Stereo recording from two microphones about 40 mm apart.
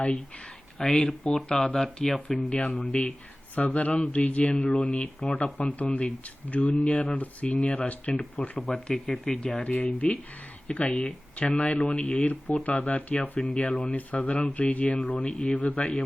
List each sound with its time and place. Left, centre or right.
0.8 s speech: centre
3.5 s speech: left
5.5 s speech: left
8.6 s speech: centre
9.6 s speech: left
15.7 s speech: left